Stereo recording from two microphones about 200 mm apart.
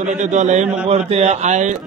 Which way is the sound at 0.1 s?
35° right (ahead or behind).